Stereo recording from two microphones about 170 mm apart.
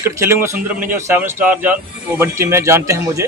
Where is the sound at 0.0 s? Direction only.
15° right (ahead or behind).